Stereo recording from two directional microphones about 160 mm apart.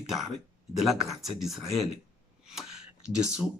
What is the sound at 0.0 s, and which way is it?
Speech, centre (ahead or behind).